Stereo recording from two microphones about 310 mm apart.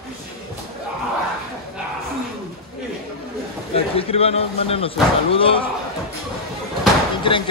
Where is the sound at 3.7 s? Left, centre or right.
Centre.